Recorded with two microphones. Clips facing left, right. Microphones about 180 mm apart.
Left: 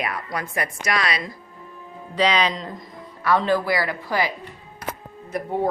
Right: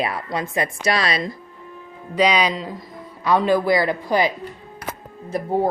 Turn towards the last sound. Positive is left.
turn(degrees=-35)  # may be behind; listen again after turning